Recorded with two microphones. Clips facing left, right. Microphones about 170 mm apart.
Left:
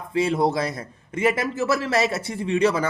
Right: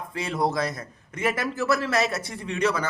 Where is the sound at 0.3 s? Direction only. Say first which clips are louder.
Right 1 dB; 25° left (ahead or behind).